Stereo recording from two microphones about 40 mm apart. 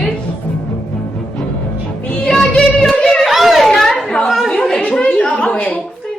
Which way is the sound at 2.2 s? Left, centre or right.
Centre.